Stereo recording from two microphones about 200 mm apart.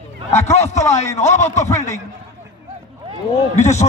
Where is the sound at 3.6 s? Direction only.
35° left (ahead or behind).